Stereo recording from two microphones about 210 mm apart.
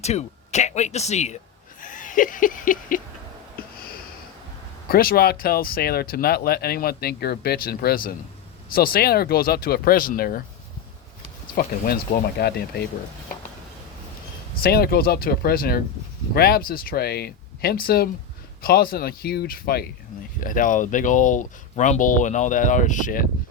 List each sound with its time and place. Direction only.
0.0 s speech: 30° left (ahead or behind)
1.8 s laughter: 40° left (ahead or behind)
3.6 s a sound: 45° left (ahead or behind)
4.9 s speech: 45° left (ahead or behind)
11.5 s speech: 45° left (ahead or behind)
14.6 s speech: 45° left (ahead or behind)